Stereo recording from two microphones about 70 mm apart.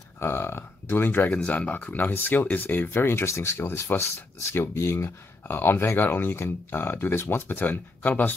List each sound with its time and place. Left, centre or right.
0.2 s speech: left